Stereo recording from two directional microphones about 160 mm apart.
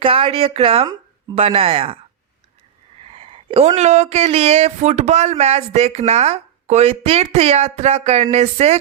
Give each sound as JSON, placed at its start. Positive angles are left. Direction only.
{"t": 0.0, "sound": "speech", "side_deg": -35}
{"t": 3.1, "sound": "speech", "side_deg": -35}